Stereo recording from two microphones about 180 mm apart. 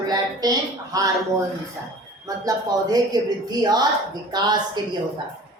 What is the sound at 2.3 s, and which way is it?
Speech, 20° right (ahead or behind).